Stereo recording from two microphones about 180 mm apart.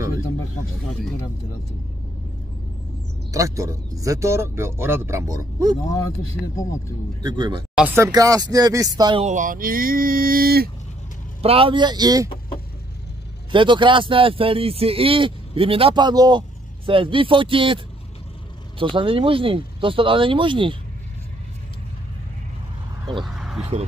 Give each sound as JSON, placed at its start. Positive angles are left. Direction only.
{"t": 3.3, "sound": "speech", "side_deg": -15}
{"t": 6.4, "sound": "speech", "side_deg": 20}
{"t": 7.2, "sound": "a man's voice", "side_deg": -25}
{"t": 7.7, "sound": "a man's voice", "side_deg": -10}
{"t": 9.2, "sound": "speech", "side_deg": -45}
{"t": 11.4, "sound": "a man's voice", "side_deg": -30}
{"t": 13.5, "sound": "a man's voice", "side_deg": -25}
{"t": 18.8, "sound": "a man's voice", "side_deg": -30}
{"t": 23.2, "sound": "a sound", "side_deg": 0}